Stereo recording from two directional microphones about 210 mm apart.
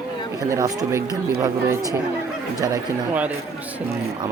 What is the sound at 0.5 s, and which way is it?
Speech, 15° right (ahead or behind).